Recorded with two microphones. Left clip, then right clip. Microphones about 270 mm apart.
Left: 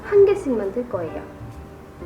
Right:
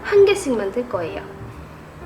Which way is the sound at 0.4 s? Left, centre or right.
Centre.